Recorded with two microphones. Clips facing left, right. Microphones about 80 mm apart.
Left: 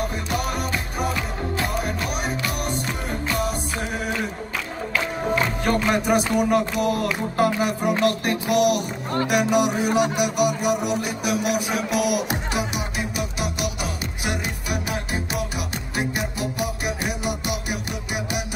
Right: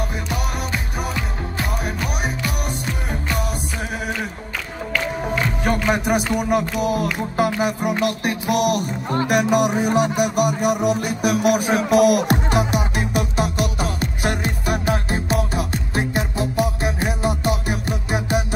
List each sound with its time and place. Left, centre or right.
6.0 s music: centre
8.5 s music: right